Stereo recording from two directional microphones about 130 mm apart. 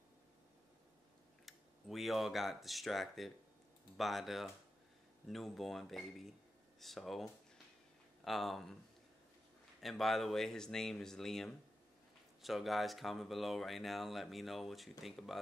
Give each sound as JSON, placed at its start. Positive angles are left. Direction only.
{"t": 1.4, "sound": "speech", "side_deg": 0}
{"t": 9.8, "sound": "speech", "side_deg": 0}